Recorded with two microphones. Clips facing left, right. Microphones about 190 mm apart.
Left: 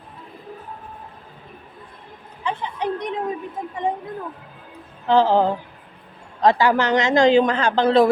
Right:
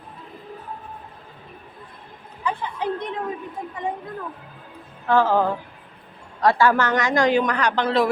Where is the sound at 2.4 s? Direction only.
15° left (ahead or behind).